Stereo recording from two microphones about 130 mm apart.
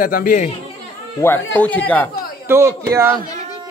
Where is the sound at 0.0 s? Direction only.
90° left.